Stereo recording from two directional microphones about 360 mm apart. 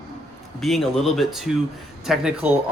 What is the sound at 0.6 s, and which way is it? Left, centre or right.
Speech, centre.